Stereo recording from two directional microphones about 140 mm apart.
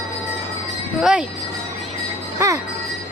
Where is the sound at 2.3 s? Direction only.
20° right (ahead or behind).